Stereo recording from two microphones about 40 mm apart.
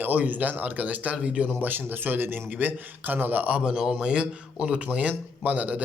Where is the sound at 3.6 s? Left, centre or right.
Centre.